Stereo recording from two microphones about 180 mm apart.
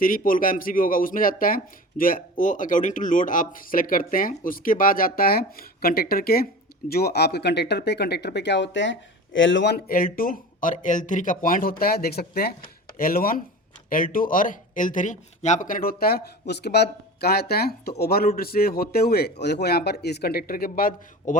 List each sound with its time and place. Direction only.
0.0 s speech: 50° left (ahead or behind)